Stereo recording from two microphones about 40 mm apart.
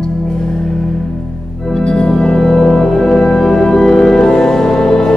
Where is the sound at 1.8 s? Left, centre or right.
Centre.